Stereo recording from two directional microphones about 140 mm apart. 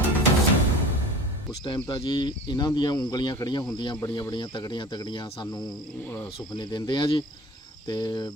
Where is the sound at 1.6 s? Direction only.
35° left (ahead or behind).